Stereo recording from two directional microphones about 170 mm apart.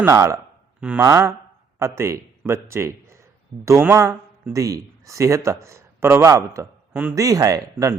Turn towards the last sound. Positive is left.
turn(degrees=-20)  # may be behind; listen again after turning